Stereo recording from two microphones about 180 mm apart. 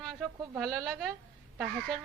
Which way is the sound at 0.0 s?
Centre (ahead or behind).